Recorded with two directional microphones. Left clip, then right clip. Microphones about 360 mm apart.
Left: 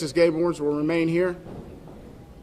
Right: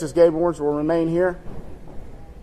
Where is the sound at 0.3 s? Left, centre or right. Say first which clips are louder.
Right 3 dB; centre.